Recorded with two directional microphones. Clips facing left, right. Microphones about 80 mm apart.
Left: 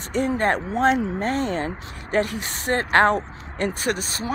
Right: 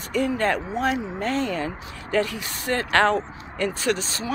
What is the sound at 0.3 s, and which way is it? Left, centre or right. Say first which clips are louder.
Speech: left 2 dB; left.